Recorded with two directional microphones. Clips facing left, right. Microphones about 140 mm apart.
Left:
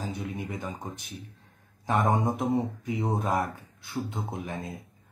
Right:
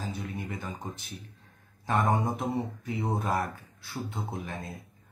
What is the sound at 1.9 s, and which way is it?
Speech, 15° left (ahead or behind).